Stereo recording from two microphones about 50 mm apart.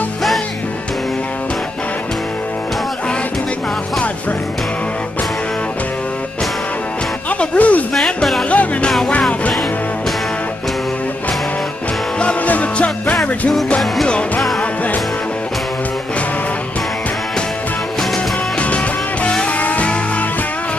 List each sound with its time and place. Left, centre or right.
7.2 s music: left
7.9 s music: centre
8.5 s music: left
12.4 s music: left
19.4 s music: left